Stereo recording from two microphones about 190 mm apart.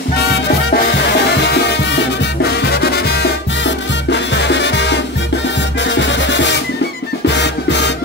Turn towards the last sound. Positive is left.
turn(degrees=65)  # may be behind; listen again after turning